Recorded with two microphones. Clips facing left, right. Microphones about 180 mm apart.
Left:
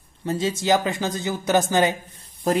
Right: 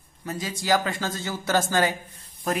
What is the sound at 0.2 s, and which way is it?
A man's voice, 25° left (ahead or behind).